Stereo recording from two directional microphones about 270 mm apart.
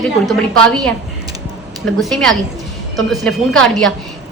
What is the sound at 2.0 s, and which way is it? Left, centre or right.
A woman's voice, centre.